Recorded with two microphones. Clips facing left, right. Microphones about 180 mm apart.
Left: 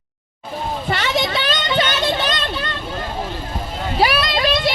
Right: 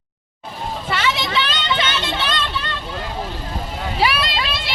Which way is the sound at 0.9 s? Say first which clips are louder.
Left 1 dB; 40° left (ahead or behind).